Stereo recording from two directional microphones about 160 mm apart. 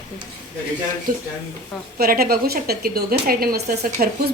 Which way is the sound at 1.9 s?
70° right (ahead or behind).